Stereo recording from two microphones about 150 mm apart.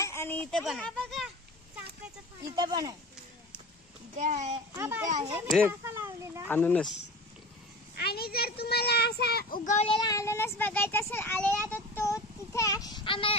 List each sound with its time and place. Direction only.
0.0 s a sound: 15° left (ahead or behind)
0.5 s a child's voice: 5° left (ahead or behind)
2.5 s speech: 30° right (ahead or behind)
4.2 s a child's voice: 50° right (ahead or behind)
4.7 s a child's voice: 15° right (ahead or behind)
5.0 s a child's voice: 50° right (ahead or behind)
5.7 s speech: 20° right (ahead or behind)
6.5 s a child's voice: 10° left (ahead or behind)
8.0 s a child's voice: 90° left
9.8 s a child's voice: 30° left (ahead or behind); by 11.6 s 10° left (ahead or behind)
11.7 s a sound: 20° left (ahead or behind); by 13.4 s 35° left (ahead or behind)